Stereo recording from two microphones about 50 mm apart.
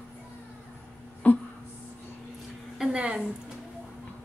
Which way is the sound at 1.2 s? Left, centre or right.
Left.